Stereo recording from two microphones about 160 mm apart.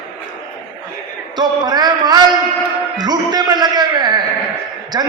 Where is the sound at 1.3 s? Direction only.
25° right (ahead or behind).